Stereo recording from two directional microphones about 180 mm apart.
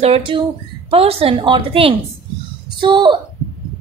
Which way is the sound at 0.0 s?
30° right (ahead or behind).